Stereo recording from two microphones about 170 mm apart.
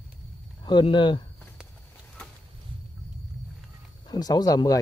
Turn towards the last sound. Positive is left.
turn(degrees=20)  # may be behind; listen again after turning